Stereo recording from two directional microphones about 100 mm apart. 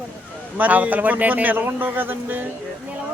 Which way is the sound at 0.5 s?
15° right (ahead or behind).